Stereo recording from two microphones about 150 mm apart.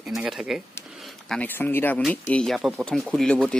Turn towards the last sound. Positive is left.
turn(degrees=5)  # may be behind; listen again after turning